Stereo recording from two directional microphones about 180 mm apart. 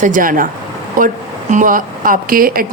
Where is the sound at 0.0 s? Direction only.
45° right (ahead or behind).